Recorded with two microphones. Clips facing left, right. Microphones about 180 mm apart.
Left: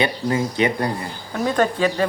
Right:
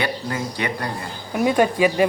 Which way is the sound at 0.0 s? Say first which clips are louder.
Left 4 dB; 25° left (ahead or behind).